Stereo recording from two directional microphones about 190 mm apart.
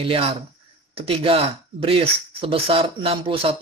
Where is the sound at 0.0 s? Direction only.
30° right (ahead or behind).